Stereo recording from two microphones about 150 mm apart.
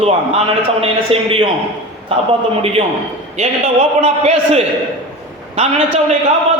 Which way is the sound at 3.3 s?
45° right (ahead or behind).